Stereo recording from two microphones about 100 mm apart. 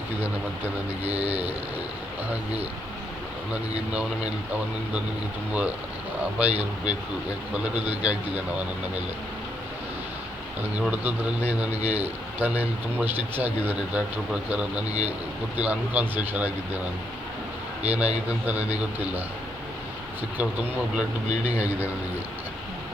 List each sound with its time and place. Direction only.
1.1 s speech: 15° right (ahead or behind)
6.4 s speech: 15° right (ahead or behind)
10.8 s speech: 15° right (ahead or behind)
11.8 s a man's voice: 90° right
12.4 s speech: 15° right (ahead or behind)
20.4 s speech: 10° right (ahead or behind)